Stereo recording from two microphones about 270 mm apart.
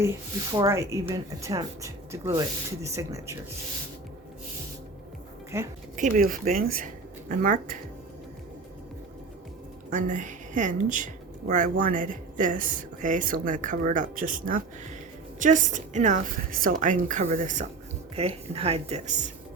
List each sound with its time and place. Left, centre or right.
0.5 s speech: centre
5.5 s speech: centre
6.0 s speech: right
9.9 s a woman's voice: right